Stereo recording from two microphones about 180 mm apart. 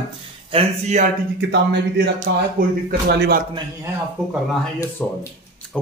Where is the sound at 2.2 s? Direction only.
55° right (ahead or behind).